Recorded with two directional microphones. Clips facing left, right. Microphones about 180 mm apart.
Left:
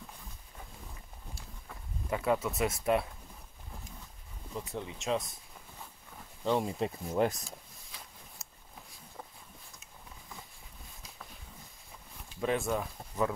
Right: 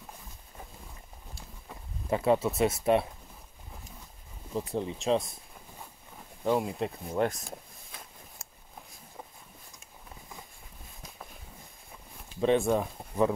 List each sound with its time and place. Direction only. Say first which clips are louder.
2.0 s speech: right 5 dB; 30° right (ahead or behind)
4.6 s speech: right 7 dB; 35° right (ahead or behind)
6.4 s speech: right 2 dB; 5° right (ahead or behind)
7.4 s rub: right 5 dB; 50° right (ahead or behind)
12.4 s speech: right 6 dB; 30° right (ahead or behind)